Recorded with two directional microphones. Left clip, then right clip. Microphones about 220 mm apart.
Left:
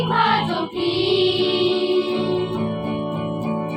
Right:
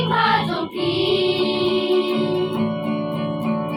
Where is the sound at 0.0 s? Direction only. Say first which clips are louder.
Even; 10° right (ahead or behind).